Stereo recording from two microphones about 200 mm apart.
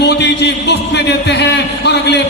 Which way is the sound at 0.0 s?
60° left (ahead or behind).